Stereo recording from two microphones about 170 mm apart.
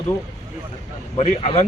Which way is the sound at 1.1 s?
40° left (ahead or behind).